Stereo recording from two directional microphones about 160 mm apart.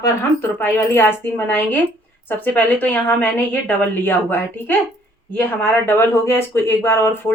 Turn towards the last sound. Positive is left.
turn(degrees=15)  # may be behind; listen again after turning